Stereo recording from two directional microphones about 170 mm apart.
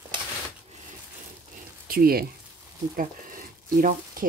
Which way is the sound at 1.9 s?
60° right (ahead or behind).